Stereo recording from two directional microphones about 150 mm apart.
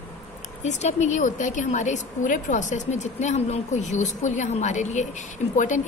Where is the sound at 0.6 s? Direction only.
50° left (ahead or behind).